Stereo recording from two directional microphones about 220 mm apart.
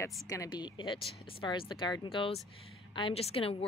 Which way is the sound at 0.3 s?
15° left (ahead or behind).